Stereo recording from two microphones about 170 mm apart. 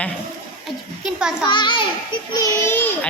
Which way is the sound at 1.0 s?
5° right (ahead or behind).